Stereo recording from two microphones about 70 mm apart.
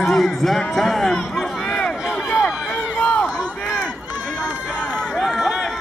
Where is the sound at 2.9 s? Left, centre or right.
Centre.